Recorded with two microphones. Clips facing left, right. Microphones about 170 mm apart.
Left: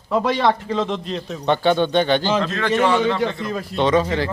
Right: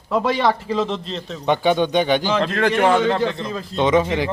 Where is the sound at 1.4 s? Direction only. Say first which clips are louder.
Even; 10° right (ahead or behind).